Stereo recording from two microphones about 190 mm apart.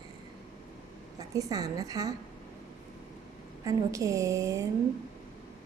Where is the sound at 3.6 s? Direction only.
15° right (ahead or behind).